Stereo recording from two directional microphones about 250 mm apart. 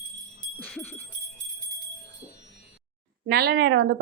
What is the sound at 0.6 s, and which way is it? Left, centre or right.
Dog, centre.